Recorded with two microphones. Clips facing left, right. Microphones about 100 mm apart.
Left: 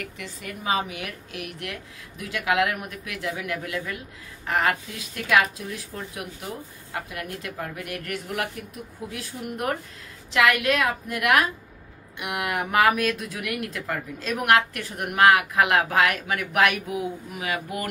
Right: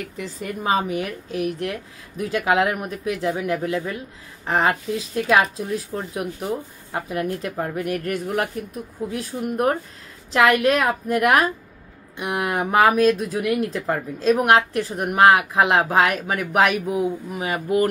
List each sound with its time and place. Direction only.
0.2 s speech: 40° right (ahead or behind)